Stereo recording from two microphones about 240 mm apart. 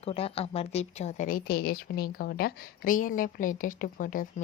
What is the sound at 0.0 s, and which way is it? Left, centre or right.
A woman's voice, left.